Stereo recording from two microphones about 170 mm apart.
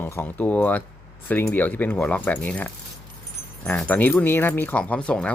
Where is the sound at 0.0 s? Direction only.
15° left (ahead or behind).